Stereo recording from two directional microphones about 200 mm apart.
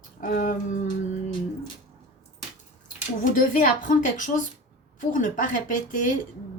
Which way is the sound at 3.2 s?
40° left (ahead or behind).